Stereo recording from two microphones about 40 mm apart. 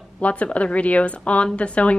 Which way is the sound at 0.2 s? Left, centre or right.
Left.